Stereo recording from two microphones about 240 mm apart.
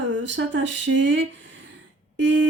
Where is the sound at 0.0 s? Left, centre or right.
Right.